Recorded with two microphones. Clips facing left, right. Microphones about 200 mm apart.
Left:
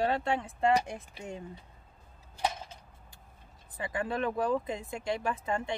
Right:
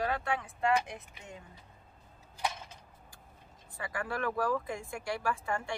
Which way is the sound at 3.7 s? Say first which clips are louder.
Left 4 dB; 20° left (ahead or behind).